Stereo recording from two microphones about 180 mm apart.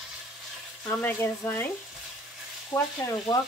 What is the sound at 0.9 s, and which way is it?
Speech, 10° left (ahead or behind).